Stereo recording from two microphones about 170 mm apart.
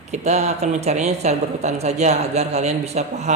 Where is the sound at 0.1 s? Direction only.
40° right (ahead or behind).